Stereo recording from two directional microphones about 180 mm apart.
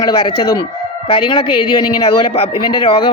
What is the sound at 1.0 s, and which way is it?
A woman's voice, 30° left (ahead or behind).